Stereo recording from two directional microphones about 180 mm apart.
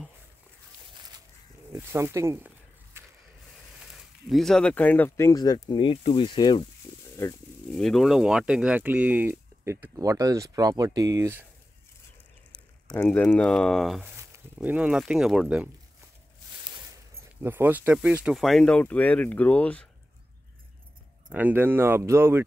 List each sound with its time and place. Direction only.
0.9 s a sound: 20° right (ahead or behind)
1.7 s snake: 15° right (ahead or behind)
3.8 s speech: centre (ahead or behind); by 6.6 s 25° left (ahead or behind)
7.2 s speech: 10° left (ahead or behind); by 11.4 s 15° right (ahead or behind)
12.5 s speech: 5° left (ahead or behind)
17.4 s speech: 10° right (ahead or behind); by 19.9 s 5° left (ahead or behind)
21.3 s speech: 10° right (ahead or behind)